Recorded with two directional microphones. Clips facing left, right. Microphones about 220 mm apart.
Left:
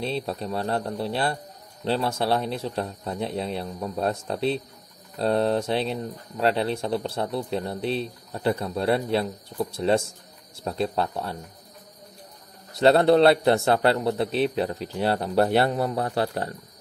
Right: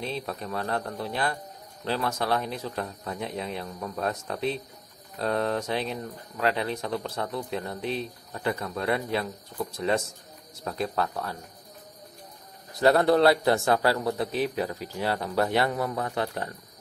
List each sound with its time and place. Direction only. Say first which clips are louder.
0.0 s a man's voice: left 4 dB; 30° left (ahead or behind)
3.6 s a man's voice: left 4 dB; 20° left (ahead or behind)
4.0 s a man's voice: left 4 dB; 30° left (ahead or behind)
12.8 s a man's voice: left 3 dB; 25° left (ahead or behind)